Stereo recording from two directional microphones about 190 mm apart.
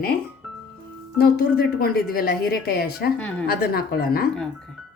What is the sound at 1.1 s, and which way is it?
A woman's voice, 50° left (ahead or behind).